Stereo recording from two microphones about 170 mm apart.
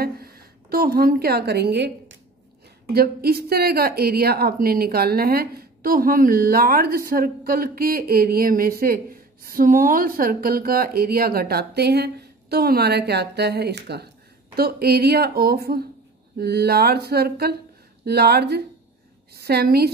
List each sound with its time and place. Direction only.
0.0 s a sound: 65° right (ahead or behind)
2.9 s a woman's voice: 65° right (ahead or behind)
14.5 s a woman's voice: 65° right (ahead or behind)